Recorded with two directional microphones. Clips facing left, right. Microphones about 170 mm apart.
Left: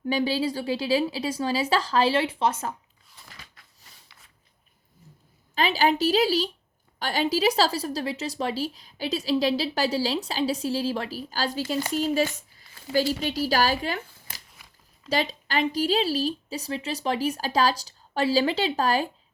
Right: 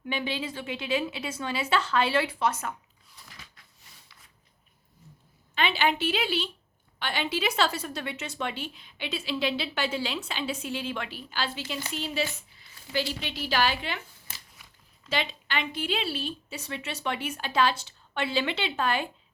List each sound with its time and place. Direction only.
0.0 s a woman's voice: 35° left (ahead or behind)
5.5 s a woman's voice: 35° left (ahead or behind)
15.1 s a woman's voice: 40° left (ahead or behind)